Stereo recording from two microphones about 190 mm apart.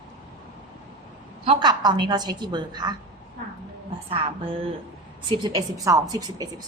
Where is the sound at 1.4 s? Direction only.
25° right (ahead or behind).